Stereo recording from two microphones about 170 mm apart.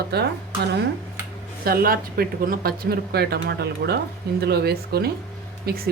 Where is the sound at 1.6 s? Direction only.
60° right (ahead or behind).